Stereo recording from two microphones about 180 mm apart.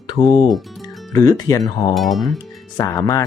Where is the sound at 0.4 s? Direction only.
Centre (ahead or behind).